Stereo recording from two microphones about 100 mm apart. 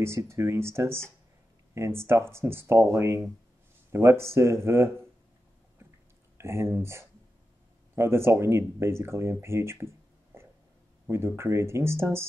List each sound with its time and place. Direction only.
0.0 s speech: 25° right (ahead or behind)
6.3 s speech: 25° right (ahead or behind)
10.3 s a sound: 25° right (ahead or behind)
11.1 s speech: 25° right (ahead or behind)